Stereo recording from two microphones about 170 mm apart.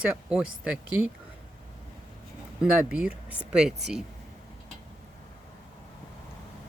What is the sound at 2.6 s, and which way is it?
Speech, 5° right (ahead or behind).